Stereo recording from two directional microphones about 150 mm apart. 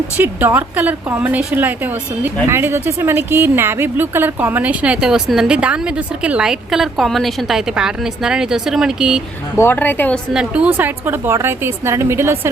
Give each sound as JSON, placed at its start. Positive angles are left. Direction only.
{"t": 0.2, "sound": "a woman's voice", "side_deg": -15}
{"t": 9.6, "sound": "a woman's voice", "side_deg": 15}
{"t": 10.3, "sound": "a woman's voice", "side_deg": -5}